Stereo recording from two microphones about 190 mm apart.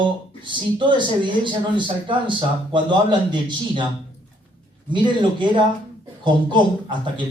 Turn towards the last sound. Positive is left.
turn(degrees=-25)  # may be behind; listen again after turning